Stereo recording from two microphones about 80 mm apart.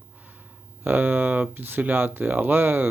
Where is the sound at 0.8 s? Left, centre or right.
Right.